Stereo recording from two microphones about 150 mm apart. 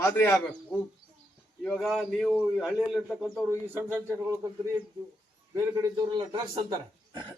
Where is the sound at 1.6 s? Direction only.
Centre (ahead or behind).